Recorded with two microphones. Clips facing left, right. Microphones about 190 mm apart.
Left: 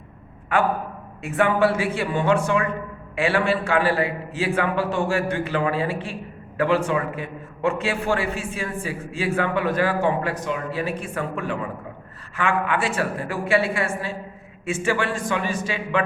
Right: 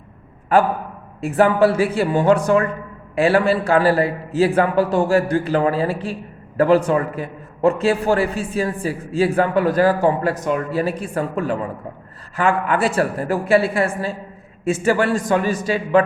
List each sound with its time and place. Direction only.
0.5 s a man's voice: 35° right (ahead or behind)